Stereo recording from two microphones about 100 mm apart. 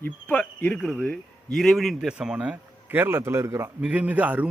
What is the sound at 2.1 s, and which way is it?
A man's voice, 10° right (ahead or behind).